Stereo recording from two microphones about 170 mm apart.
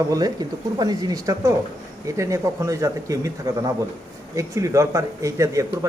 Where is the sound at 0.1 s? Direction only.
20° right (ahead or behind).